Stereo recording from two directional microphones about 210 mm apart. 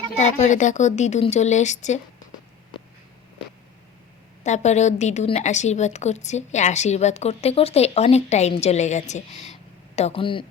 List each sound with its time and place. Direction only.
0.2 s a woman's voice: 35° left (ahead or behind)
4.4 s a woman's voice: 35° left (ahead or behind)